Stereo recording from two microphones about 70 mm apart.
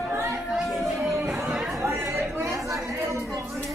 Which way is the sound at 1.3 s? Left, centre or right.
Centre.